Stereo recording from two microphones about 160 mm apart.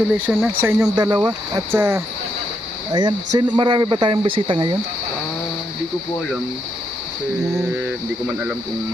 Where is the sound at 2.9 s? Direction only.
30° right (ahead or behind).